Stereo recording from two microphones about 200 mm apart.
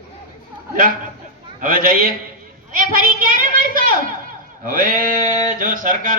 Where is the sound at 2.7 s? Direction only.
40° right (ahead or behind).